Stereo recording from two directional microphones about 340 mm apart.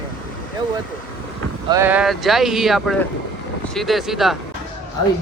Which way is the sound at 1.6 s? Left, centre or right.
Centre.